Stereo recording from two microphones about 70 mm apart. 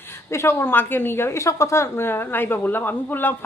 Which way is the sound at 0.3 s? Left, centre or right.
Left.